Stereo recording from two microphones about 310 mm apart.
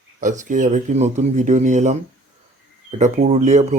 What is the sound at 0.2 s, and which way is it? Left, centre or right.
Speech, right.